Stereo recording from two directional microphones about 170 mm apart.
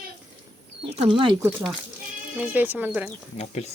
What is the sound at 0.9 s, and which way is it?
Speech, 30° right (ahead or behind).